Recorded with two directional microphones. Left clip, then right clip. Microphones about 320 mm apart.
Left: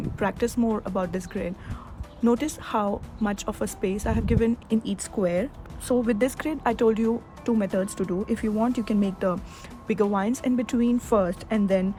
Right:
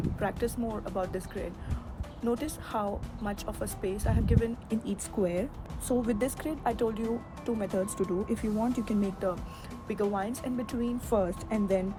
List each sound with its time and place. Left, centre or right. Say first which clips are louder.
0.2 s speech: left 7 dB; left